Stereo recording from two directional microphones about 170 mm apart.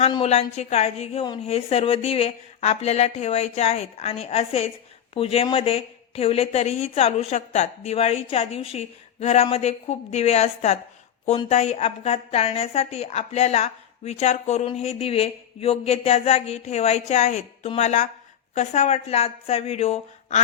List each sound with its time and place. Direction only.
0.1 s speech: 35° left (ahead or behind)